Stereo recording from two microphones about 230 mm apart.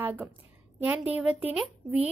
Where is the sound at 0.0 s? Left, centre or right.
Centre.